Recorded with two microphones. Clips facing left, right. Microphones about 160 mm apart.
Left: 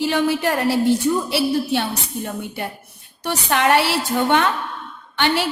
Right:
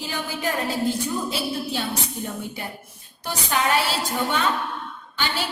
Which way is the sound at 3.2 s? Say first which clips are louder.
Left 5 dB; 70° left (ahead or behind).